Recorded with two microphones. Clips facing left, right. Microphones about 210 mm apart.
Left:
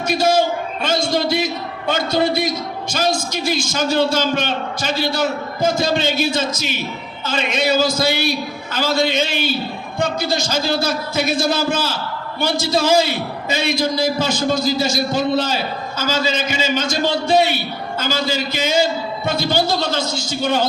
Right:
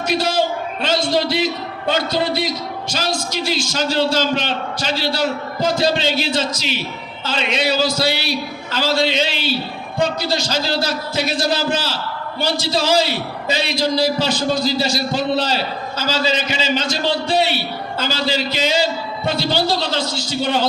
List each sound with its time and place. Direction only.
0.1 s a man's voice: 50° left (ahead or behind)